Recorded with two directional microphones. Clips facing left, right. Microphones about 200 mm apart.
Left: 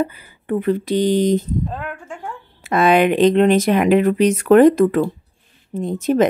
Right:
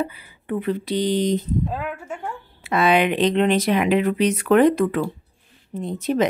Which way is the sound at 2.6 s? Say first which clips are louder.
Left 4 dB; 45° left (ahead or behind).